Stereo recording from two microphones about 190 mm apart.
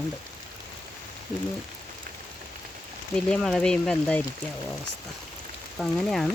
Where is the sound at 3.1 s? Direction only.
5° left (ahead or behind).